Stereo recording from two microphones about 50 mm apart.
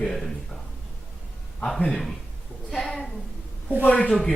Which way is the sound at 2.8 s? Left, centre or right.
Centre.